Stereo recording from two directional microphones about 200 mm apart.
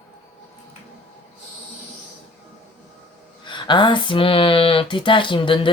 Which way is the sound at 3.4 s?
25° left (ahead or behind).